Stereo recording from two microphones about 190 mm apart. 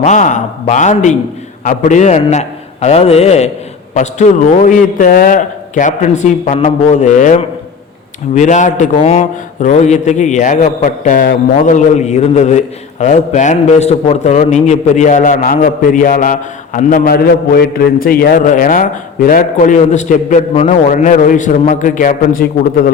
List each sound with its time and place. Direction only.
0.0 s a man's voice: 40° left (ahead or behind)